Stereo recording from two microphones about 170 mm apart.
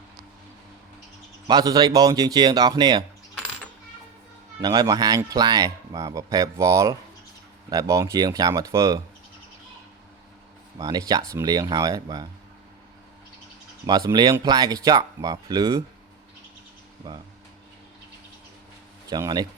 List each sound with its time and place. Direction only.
1.5 s speech: 25° right (ahead or behind)
4.6 s speech: 20° right (ahead or behind)
10.8 s speech: 25° right (ahead or behind)
13.8 s speech: 25° right (ahead or behind)
17.0 s speech: 25° right (ahead or behind)
19.1 s speech: 25° right (ahead or behind)